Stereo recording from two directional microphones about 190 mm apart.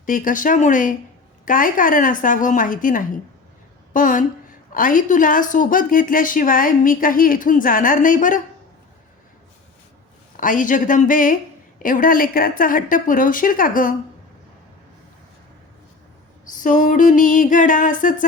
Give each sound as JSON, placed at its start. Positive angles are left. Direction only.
{"t": 0.0, "sound": "a woman's voice", "side_deg": 45}
{"t": 10.3, "sound": "a woman's voice", "side_deg": 45}
{"t": 16.5, "sound": "a woman's voice", "side_deg": 40}